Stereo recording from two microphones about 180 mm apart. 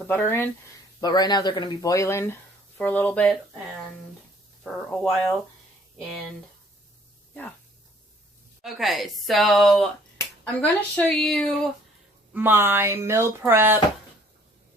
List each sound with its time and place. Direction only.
0.1 s speech: 10° left (ahead or behind)
4.6 s speech: 5° left (ahead or behind)
8.6 s speech: centre (ahead or behind)
12.3 s speech: 10° right (ahead or behind)